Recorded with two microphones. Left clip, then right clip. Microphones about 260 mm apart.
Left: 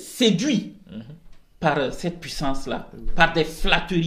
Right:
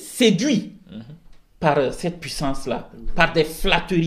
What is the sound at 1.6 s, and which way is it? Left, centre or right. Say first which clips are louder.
Speech: right 3 dB; right.